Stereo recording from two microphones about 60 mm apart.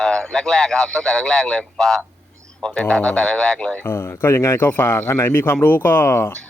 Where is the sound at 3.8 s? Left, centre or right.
Left.